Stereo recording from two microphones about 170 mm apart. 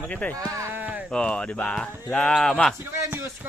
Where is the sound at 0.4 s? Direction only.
15° right (ahead or behind).